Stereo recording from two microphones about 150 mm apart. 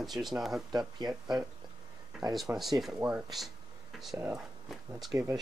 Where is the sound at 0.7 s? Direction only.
30° right (ahead or behind).